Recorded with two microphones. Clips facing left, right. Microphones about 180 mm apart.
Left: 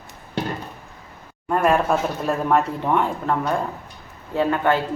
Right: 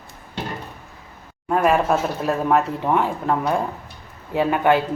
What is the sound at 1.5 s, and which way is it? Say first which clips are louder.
Speech: right 1 dB; centre (ahead or behind).